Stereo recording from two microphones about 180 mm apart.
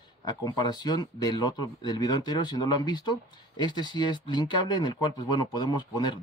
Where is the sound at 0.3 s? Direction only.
20° left (ahead or behind).